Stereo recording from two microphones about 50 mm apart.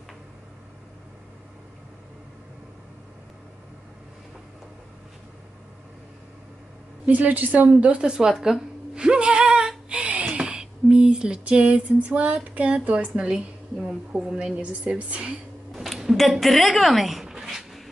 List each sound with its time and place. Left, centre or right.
7.1 s a woman's voice: right; by 9.7 s centre
9.8 s a sound: right
12.4 s a woman's voice: right
13.2 s a woman's voice: centre
15.7 s a sound: centre
16.0 s speech: centre